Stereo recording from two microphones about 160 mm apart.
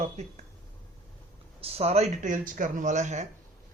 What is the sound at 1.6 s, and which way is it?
Speech, 40° right (ahead or behind).